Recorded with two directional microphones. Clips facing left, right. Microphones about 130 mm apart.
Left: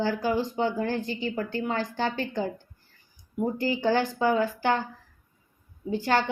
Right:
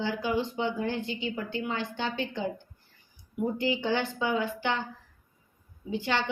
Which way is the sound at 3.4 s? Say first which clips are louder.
Left 3 dB; 40° left (ahead or behind).